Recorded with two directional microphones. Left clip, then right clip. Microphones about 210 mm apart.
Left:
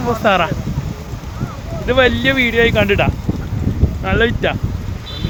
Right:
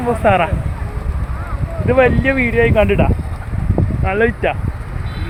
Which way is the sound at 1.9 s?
5° left (ahead or behind).